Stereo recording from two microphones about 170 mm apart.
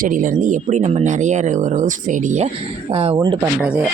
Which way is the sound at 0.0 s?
50° right (ahead or behind).